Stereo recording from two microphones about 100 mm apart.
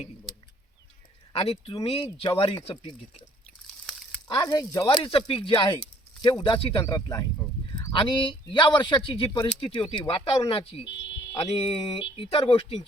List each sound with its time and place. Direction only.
1.3 s speech: 75° left (ahead or behind); by 3.2 s 55° left (ahead or behind)
4.3 s speech: 45° left (ahead or behind)
6.4 s speech: 65° left (ahead or behind)
6.8 s speech: 35° left (ahead or behind)
7.9 s speech: 55° left (ahead or behind); by 10.8 s 75° left (ahead or behind)
11.4 s speech: 90° left; by 12.8 s 70° left (ahead or behind)